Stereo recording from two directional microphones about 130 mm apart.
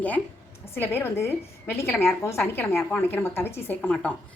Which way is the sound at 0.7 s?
20° left (ahead or behind).